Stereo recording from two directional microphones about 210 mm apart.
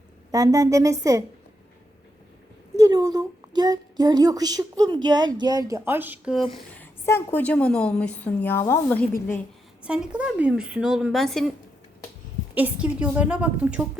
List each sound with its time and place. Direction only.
0.3 s a woman's voice: 15° right (ahead or behind)
2.7 s a woman's voice: 15° right (ahead or behind)
6.5 s a woman's voice: 5° left (ahead or behind)
9.8 s speech: 5° right (ahead or behind)
12.5 s a woman's voice: 5° right (ahead or behind)